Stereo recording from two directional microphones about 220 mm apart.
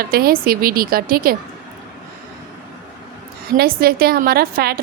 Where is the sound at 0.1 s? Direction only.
40° right (ahead or behind).